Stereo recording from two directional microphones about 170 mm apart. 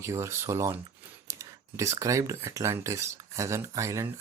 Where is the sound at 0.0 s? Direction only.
15° right (ahead or behind).